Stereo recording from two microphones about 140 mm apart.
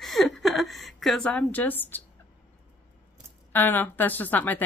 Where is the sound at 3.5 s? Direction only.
15° left (ahead or behind).